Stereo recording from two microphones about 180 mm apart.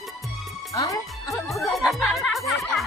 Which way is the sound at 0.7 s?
20° left (ahead or behind).